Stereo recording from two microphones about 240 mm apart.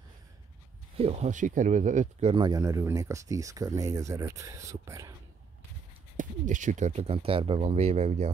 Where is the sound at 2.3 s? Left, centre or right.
Centre.